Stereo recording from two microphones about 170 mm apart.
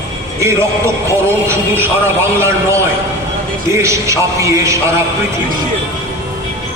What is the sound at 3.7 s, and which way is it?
A man's voice, 15° right (ahead or behind).